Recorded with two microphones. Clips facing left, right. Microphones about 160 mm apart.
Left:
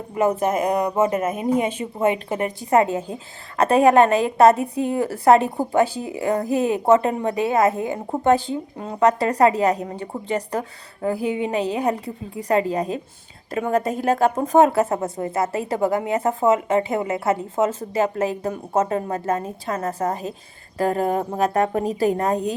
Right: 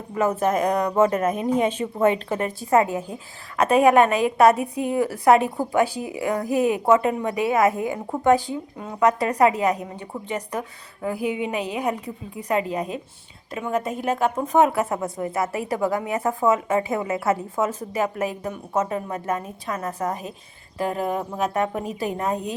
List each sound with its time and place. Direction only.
0.1 s a woman's voice: 15° left (ahead or behind); by 20.1 s 30° left (ahead or behind)
20.7 s a woman's voice: 45° left (ahead or behind)